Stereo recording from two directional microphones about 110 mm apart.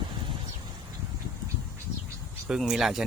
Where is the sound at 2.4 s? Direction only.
5° right (ahead or behind).